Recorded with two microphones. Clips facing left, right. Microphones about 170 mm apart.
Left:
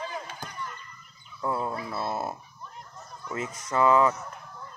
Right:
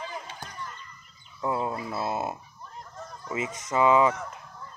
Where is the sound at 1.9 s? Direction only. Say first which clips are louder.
Right 1 dB; 10° right (ahead or behind).